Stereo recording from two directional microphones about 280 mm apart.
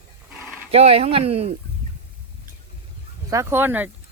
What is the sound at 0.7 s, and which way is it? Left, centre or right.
Speech, right.